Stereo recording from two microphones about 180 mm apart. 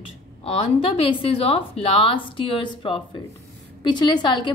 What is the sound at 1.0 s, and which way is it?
A woman's voice, 35° left (ahead or behind).